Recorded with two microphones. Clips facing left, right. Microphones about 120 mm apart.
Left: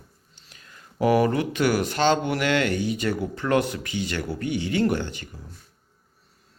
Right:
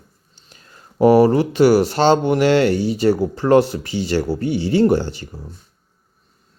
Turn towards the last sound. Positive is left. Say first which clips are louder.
# right 7 dB
turn(degrees=-35)  # may be behind; listen again after turning